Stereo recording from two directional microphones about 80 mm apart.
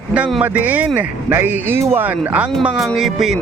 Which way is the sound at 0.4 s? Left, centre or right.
Right.